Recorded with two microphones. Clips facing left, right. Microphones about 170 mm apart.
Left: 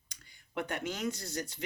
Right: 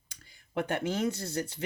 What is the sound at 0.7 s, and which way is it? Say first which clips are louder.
Speech: right 6 dB; 30° right (ahead or behind).